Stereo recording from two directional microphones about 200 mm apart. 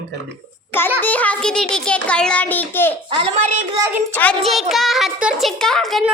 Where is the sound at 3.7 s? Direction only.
15° right (ahead or behind).